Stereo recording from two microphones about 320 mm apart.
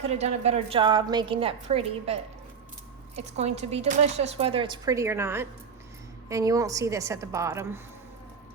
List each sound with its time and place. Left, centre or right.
0.0 s a woman's voice: centre
3.2 s a woman's voice: centre